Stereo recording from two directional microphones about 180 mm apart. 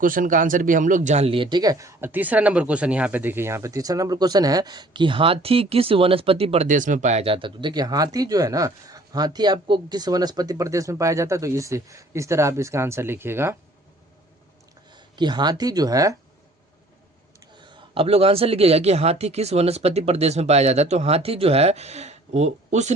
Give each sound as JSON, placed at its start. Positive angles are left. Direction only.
{"t": 0.0, "sound": "speech", "side_deg": -50}
{"t": 14.8, "sound": "speech", "side_deg": -25}
{"t": 17.6, "sound": "speech", "side_deg": -25}